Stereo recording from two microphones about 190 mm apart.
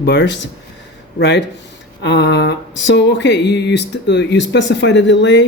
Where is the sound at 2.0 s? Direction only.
65° left (ahead or behind).